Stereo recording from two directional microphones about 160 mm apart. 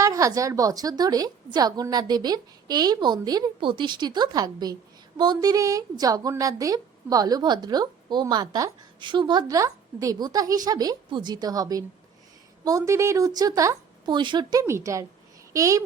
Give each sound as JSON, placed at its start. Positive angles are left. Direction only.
{"t": 0.0, "sound": "a woman's voice", "side_deg": -20}